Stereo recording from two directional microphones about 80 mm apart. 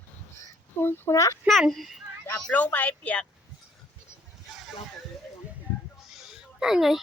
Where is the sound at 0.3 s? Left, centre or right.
Left.